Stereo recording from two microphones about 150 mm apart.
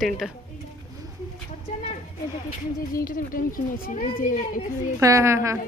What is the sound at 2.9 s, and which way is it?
A child's voice, 65° left (ahead or behind).